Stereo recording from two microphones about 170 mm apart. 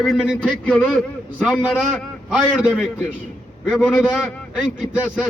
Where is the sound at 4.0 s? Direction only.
5° right (ahead or behind).